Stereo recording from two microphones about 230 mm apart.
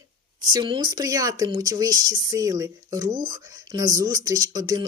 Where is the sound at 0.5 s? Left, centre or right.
Right.